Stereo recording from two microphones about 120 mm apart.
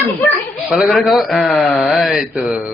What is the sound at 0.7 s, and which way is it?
A man's voice, centre (ahead or behind).